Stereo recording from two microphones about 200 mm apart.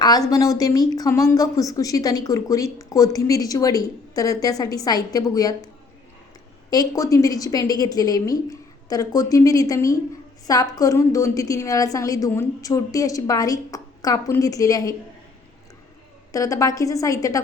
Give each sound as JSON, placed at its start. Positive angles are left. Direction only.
{"t": 0.0, "sound": "a woman's voice", "side_deg": 20}
{"t": 16.3, "sound": "a woman's voice", "side_deg": 15}